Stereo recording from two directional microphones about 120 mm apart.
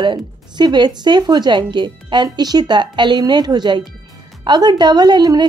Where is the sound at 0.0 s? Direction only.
40° right (ahead or behind).